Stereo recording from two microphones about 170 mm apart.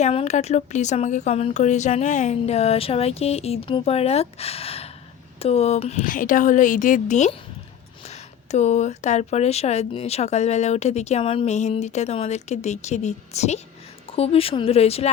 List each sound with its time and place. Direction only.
0.0 s a woman's voice: 40° left (ahead or behind)